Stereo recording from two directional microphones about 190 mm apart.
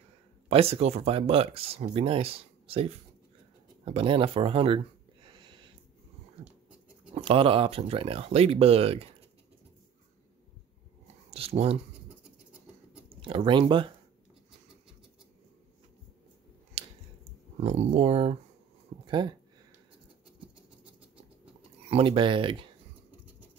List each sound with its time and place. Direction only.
0.5 s speech: 30° right (ahead or behind)
7.2 s speech: 30° right (ahead or behind)
11.2 s speech: 30° right (ahead or behind)
13.1 s speech: 30° right (ahead or behind)
16.8 s a sound: 30° right (ahead or behind)
17.6 s speech: 35° right (ahead or behind)
21.8 s speech: 30° right (ahead or behind)